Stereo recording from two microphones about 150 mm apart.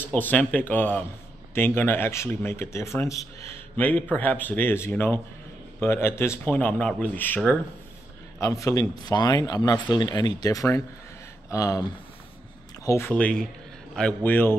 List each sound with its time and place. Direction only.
0.0 s speech: 10° left (ahead or behind)
8.4 s speech: 20° left (ahead or behind)